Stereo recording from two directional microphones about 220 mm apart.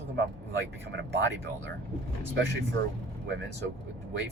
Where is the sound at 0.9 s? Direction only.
50° right (ahead or behind).